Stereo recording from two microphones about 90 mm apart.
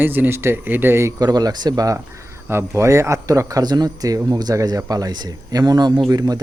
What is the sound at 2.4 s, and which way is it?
A man's voice, 30° right (ahead or behind).